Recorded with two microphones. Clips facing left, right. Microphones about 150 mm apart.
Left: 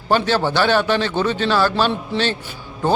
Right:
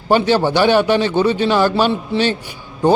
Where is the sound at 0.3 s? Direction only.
15° right (ahead or behind).